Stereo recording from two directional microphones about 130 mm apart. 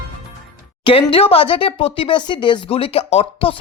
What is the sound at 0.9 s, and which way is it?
Speech, 45° left (ahead or behind).